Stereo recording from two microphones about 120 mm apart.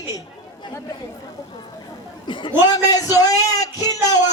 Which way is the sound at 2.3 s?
40° left (ahead or behind).